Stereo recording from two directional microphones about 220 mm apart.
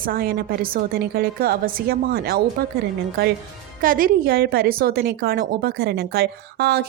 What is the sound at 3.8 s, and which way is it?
A woman's voice, 40° right (ahead or behind).